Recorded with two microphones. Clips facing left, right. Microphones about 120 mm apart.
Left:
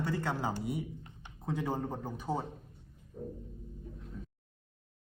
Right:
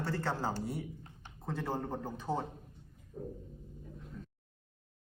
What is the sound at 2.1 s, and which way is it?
Speech, 15° left (ahead or behind).